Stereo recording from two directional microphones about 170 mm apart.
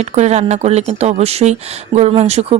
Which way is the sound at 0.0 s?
40° right (ahead or behind).